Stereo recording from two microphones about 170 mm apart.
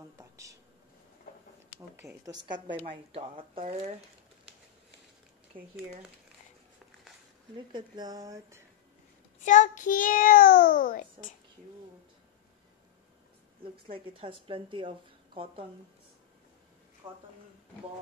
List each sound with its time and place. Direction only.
0.2 s a sound: 20° right (ahead or behind)
2.0 s a woman's voice: 15° right (ahead or behind)
2.4 s a woman's voice: 25° right (ahead or behind)
7.5 s speech: 25° right (ahead or behind)
9.4 s a child's voice: 50° left (ahead or behind)
13.9 s a woman's voice: 30° right (ahead or behind)
17.0 s speech: 25° right (ahead or behind)